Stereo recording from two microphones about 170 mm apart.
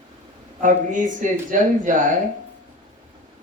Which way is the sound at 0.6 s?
50° right (ahead or behind).